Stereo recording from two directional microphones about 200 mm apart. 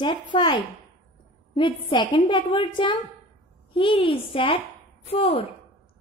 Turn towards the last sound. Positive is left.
turn(degrees=30)  # may be behind; listen again after turning